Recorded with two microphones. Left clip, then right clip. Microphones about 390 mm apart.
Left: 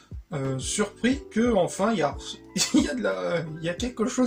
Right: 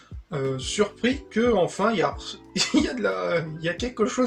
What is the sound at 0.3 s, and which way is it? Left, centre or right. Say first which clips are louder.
Speech: right 3 dB; right.